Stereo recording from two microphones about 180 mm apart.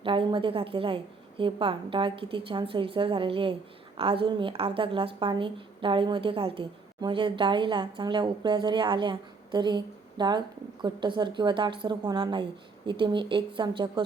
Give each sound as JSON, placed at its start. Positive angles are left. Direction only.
{"t": 0.0, "sound": "a woman's voice", "side_deg": -30}